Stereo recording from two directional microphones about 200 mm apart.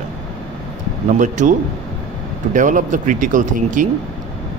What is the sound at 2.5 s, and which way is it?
Speech, 40° right (ahead or behind).